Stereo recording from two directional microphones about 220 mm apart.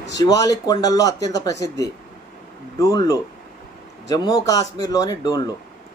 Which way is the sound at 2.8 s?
15° left (ahead or behind).